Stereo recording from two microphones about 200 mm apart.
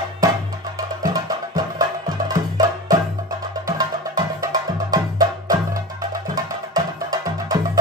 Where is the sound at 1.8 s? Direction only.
20° right (ahead or behind).